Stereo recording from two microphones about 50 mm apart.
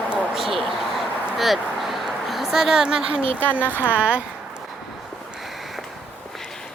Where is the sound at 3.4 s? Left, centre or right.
Left.